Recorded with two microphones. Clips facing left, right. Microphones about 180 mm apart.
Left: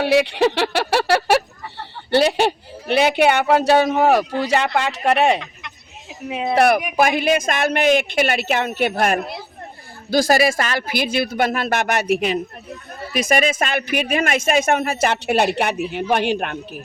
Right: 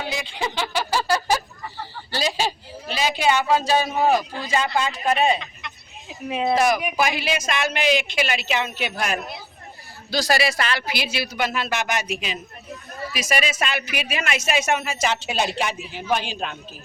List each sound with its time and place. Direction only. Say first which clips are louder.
0.0 s speech: left 12 dB; 70° left (ahead or behind)
6.2 s speech: even; 10° left (ahead or behind)
6.6 s speech: left 9 dB; 60° left (ahead or behind)